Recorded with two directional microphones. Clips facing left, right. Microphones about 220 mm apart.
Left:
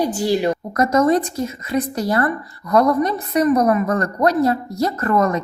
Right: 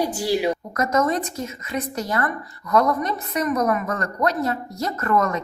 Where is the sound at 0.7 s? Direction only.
35° left (ahead or behind).